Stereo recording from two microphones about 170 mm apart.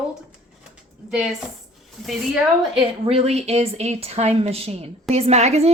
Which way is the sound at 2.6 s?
25° right (ahead or behind).